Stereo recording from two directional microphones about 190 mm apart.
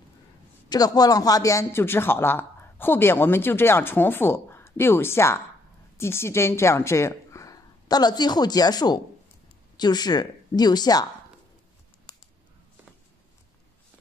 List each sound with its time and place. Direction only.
0.7 s a woman's voice: 20° left (ahead or behind)